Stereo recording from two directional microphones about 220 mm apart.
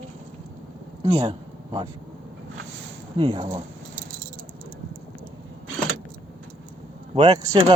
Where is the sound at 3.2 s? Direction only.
20° right (ahead or behind).